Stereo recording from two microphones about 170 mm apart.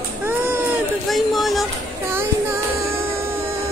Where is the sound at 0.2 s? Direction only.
10° right (ahead or behind).